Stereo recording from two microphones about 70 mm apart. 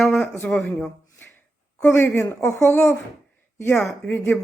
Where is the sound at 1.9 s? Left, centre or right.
Left.